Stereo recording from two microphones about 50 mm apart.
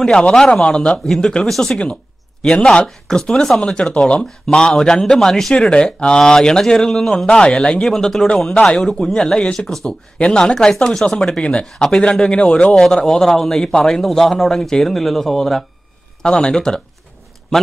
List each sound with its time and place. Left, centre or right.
0.3 s a man's voice: centre
0.6 s a man's voice: centre
5.5 s a man's voice: centre
7.2 s a man's voice: centre
10.4 s a man's voice: centre
12.7 s a man's voice: centre
16.2 s a man's voice: centre